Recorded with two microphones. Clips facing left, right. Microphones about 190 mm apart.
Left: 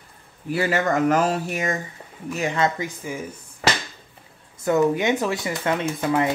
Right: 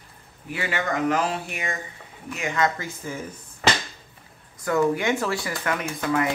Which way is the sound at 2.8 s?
15° left (ahead or behind).